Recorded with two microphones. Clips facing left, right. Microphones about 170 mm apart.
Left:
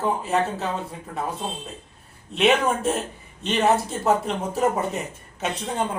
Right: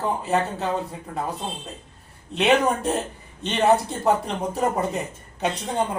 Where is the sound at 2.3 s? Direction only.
Centre (ahead or behind).